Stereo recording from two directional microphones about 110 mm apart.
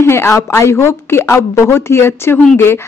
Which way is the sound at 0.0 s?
25° left (ahead or behind).